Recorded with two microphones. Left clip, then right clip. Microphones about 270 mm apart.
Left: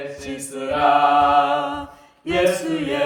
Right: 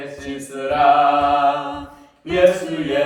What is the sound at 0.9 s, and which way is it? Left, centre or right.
Mantra, centre.